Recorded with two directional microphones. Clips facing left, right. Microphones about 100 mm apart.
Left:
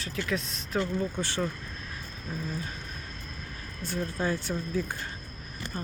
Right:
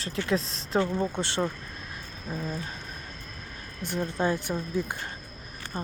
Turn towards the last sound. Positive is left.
turn(degrees=-25)  # may be behind; listen again after turning